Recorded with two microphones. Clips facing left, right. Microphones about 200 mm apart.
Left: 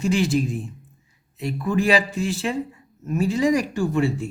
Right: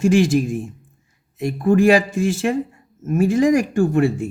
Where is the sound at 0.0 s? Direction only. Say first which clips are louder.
Right 5 dB; 50° right (ahead or behind).